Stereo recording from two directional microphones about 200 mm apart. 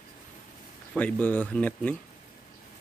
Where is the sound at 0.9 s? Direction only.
5° left (ahead or behind).